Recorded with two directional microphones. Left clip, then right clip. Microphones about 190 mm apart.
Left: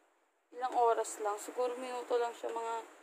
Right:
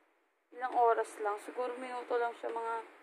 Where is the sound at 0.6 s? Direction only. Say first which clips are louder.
Right 1 dB; 15° left (ahead or behind).